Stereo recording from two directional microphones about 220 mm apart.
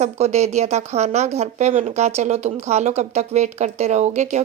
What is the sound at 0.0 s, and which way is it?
A woman's voice, 30° right (ahead or behind).